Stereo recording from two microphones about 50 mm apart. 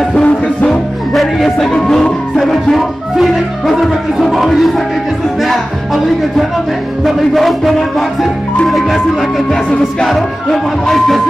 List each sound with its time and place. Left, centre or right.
0.1 s music: left
0.7 s music: centre
1.7 s music: centre
7.1 s speech: centre
10.0 s music: centre